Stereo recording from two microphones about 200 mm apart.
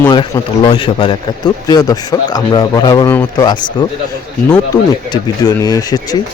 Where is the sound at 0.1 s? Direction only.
25° left (ahead or behind).